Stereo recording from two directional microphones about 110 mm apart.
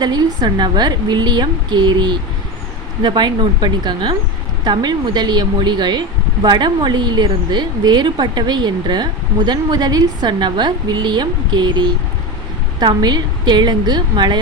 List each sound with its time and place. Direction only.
0.0 s a woman's voice: 40° right (ahead or behind)